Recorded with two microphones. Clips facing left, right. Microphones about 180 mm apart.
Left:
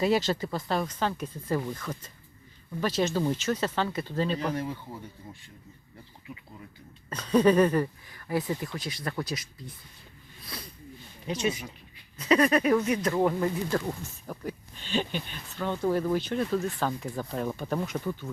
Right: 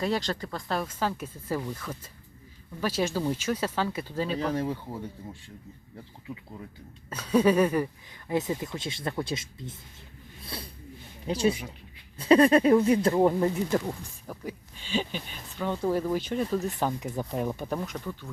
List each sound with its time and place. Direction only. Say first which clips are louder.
0.0 s speech: left 4 dB; 5° left (ahead or behind)
4.5 s speech: right 3 dB; 30° right (ahead or behind)
7.1 s speech: left 1 dB; 10° right (ahead or behind)
8.3 s speech: right 1 dB; 20° right (ahead or behind)
10.4 s a sound: right 3 dB; 30° right (ahead or behind)
11.3 s speech: right 4 dB; 30° right (ahead or behind)
14.3 s speech: left 1 dB; 5° right (ahead or behind)
17.7 s speech: left 3 dB; 5° left (ahead or behind)